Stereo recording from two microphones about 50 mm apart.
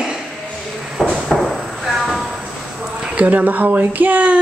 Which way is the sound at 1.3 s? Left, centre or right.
Centre.